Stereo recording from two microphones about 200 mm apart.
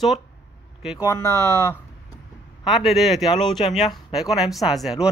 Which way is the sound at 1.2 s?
15° right (ahead or behind).